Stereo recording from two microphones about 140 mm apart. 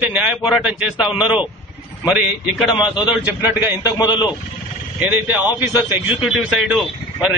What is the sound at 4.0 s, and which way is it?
Speech, 30° left (ahead or behind).